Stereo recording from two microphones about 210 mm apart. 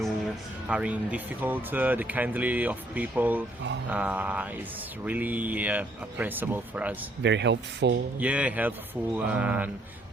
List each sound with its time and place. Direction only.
0.7 s speech: 5° right (ahead or behind)
7.2 s speech: 55° right (ahead or behind)
8.2 s speech: 5° right (ahead or behind)